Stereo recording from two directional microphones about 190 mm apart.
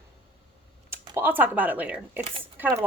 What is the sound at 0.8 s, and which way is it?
A woman's voice, 10° right (ahead or behind).